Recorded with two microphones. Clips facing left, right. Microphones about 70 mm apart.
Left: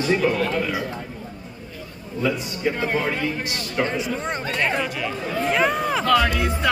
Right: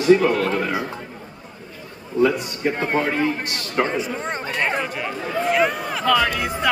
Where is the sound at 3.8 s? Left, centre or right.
Right.